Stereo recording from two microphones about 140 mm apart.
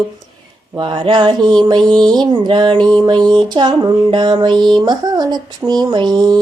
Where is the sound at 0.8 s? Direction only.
35° right (ahead or behind).